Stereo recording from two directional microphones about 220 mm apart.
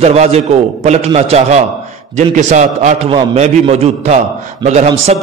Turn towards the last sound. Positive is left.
turn(degrees=-30)  # may be behind; listen again after turning